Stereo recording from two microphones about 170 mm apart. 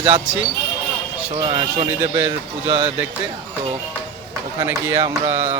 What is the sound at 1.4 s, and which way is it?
Speech, 35° right (ahead or behind).